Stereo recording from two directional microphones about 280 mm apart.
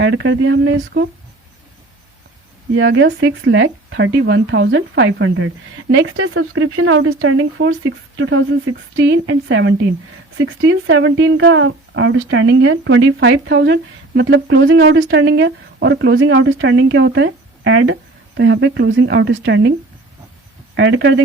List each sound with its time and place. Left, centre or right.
0.0 s speech: right
2.7 s speech: right
20.7 s speech: right